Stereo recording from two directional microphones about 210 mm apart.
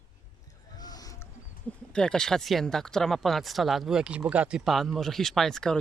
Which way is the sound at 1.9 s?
5° left (ahead or behind).